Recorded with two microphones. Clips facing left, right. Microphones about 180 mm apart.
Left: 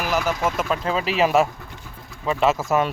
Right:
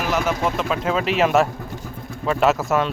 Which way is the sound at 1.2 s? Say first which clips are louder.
Even; 5° left (ahead or behind).